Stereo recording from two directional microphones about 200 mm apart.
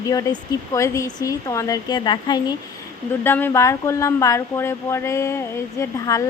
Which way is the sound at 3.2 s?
10° left (ahead or behind).